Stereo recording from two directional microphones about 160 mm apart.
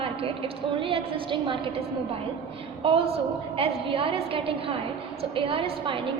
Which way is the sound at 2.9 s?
35° right (ahead or behind).